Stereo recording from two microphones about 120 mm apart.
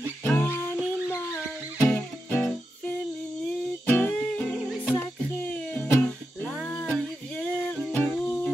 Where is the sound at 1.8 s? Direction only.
15° left (ahead or behind).